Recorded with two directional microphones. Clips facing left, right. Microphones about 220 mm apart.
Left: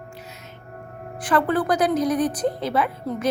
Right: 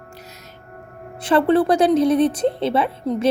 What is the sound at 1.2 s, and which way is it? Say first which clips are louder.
A woman's voice: right 5 dB; 25° right (ahead or behind).